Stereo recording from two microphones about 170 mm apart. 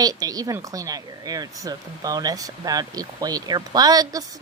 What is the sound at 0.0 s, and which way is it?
A woman's voice, 20° right (ahead or behind).